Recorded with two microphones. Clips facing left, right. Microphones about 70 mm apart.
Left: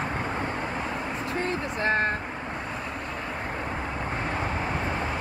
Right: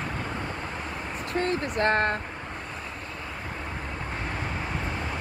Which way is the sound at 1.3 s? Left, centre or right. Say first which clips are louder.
Right 5 dB; right.